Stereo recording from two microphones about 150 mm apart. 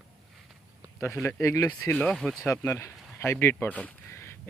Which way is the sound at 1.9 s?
5° left (ahead or behind).